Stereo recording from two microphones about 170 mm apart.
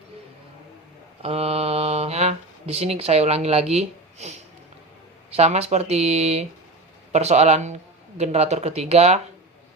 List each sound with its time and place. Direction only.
1.2 s speech: 35° right (ahead or behind)